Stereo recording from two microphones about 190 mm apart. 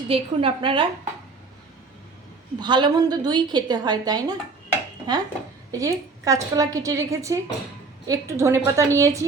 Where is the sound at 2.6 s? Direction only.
25° right (ahead or behind).